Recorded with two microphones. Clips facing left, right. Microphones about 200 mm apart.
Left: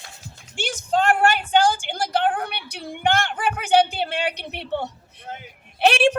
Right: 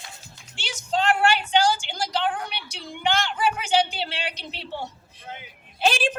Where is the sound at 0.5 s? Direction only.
50° left (ahead or behind).